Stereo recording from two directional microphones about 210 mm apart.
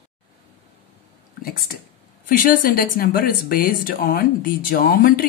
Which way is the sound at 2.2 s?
45° left (ahead or behind).